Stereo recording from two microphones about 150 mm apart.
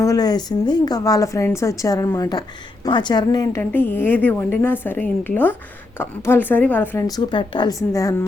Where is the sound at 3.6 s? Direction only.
10° left (ahead or behind).